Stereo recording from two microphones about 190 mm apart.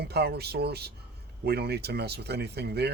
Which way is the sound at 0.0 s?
60° right (ahead or behind).